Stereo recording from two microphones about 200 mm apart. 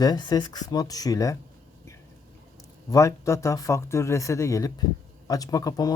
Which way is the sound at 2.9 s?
15° left (ahead or behind).